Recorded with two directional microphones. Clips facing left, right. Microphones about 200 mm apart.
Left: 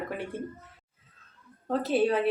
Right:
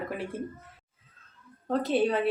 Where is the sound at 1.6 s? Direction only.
Centre (ahead or behind).